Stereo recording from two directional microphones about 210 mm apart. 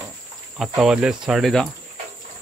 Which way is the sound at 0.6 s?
5° right (ahead or behind).